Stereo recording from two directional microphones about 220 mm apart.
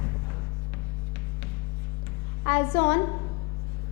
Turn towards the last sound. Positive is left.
turn(degrees=20)  # may be behind; listen again after turning